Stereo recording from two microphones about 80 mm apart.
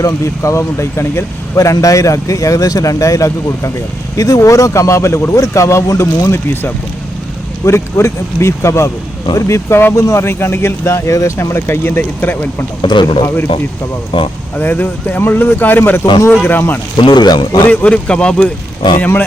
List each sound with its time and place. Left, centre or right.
0.0 s speech: left
6.5 s speech: left
7.6 s speech: left
12.8 s speech: left
14.5 s speech: left
17.0 s speech: left
17.7 s speech: centre
18.9 s speech: left